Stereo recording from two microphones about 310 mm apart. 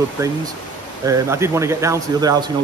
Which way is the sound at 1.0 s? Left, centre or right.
Centre.